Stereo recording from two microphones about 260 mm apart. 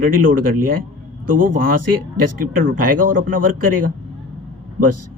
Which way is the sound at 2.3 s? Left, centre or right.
Right.